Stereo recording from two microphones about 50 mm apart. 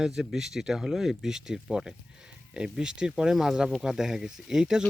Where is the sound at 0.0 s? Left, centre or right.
Centre.